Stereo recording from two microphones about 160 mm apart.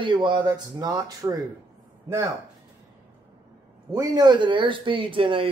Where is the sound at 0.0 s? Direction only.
30° right (ahead or behind).